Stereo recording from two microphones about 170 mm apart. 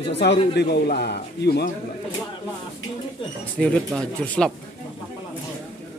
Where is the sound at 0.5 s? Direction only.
75° left (ahead or behind).